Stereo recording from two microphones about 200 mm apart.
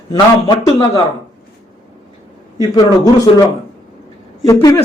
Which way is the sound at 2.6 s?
20° left (ahead or behind).